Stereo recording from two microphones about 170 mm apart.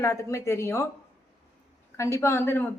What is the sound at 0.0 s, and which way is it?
Speech, 15° left (ahead or behind).